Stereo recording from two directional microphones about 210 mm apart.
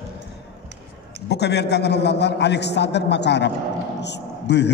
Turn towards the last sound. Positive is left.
turn(degrees=55)  # may be behind; listen again after turning